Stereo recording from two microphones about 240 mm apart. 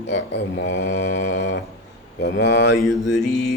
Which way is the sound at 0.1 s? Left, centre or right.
Left.